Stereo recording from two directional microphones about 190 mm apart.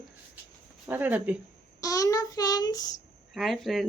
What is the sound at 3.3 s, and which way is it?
Speech, centre (ahead or behind).